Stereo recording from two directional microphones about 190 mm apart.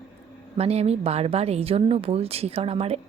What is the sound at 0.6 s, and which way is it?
Speech, 35° right (ahead or behind).